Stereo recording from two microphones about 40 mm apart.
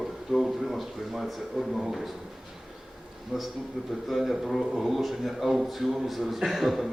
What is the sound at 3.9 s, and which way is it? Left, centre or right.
A man's voice, centre.